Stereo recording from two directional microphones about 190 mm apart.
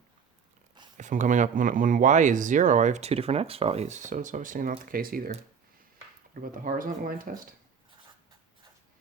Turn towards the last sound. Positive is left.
turn(degrees=-50)  # may be behind; listen again after turning